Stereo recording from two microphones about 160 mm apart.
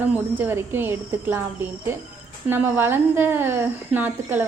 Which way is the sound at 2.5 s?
10° right (ahead or behind).